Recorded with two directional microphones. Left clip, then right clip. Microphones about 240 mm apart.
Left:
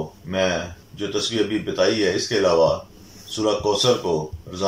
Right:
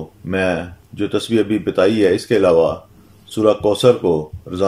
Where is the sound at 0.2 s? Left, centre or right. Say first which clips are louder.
Right 3 dB; right.